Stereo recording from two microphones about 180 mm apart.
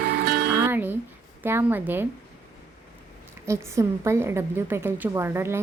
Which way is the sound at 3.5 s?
15° right (ahead or behind).